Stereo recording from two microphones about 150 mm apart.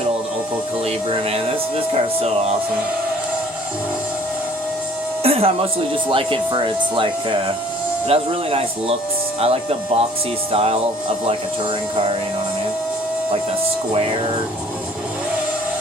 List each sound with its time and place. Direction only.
1.9 s speech: 45° right (ahead or behind)
5.2 s a sound: 40° right (ahead or behind)
6.1 s speech: 35° right (ahead or behind)